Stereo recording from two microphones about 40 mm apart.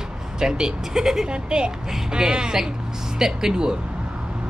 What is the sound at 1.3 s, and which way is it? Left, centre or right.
Speech, right.